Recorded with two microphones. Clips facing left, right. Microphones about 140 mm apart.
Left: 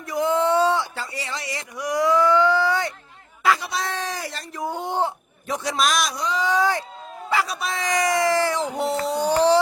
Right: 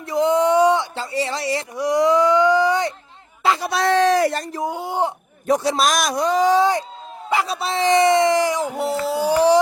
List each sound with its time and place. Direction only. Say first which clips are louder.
0.0 s speech: right 4 dB; 25° right (ahead or behind)
3.7 s speech: right 12 dB; 75° right (ahead or behind); by 4.4 s 55° right (ahead or behind)
4.6 s speech: right 1 dB; 10° right (ahead or behind)
5.5 s a man's voice: right 5 dB; 35° right (ahead or behind)
6.5 s speech: right 5 dB; 25° right (ahead or behind)